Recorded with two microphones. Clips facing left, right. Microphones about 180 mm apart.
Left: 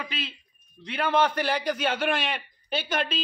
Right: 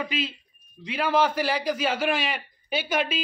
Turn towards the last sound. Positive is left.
turn(degrees=-5)  # may be behind; listen again after turning